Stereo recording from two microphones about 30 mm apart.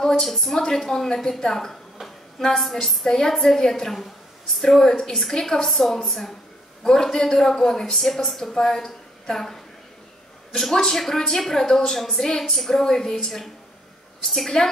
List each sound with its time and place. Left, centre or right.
0.2 s a woman's voice: centre
5.3 s a man's voice: left
5.7 s a woman's voice: centre
6.8 s a man's voice: centre
10.6 s a woman's voice: centre